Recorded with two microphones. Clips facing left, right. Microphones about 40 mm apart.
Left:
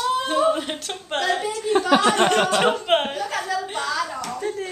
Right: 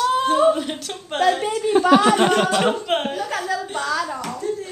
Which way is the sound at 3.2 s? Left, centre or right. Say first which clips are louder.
Right 1 dB; centre.